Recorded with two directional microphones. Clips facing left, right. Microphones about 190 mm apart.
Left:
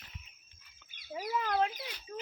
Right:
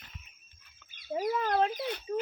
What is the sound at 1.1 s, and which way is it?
Chicken, 45° right (ahead or behind).